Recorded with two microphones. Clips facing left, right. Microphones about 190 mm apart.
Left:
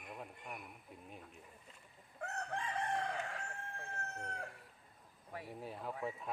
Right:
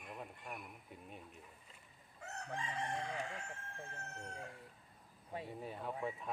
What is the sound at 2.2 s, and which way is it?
Chicken, 60° left (ahead or behind).